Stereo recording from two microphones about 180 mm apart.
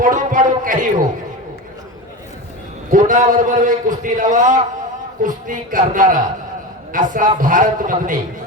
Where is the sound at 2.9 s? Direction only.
45° right (ahead or behind).